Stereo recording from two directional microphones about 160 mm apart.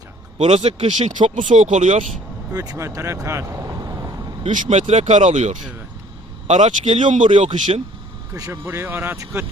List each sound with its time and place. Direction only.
0.3 s speech: 40° right (ahead or behind)
2.5 s speech: 20° right (ahead or behind)
4.5 s speech: 45° right (ahead or behind)
8.3 s speech: 20° right (ahead or behind)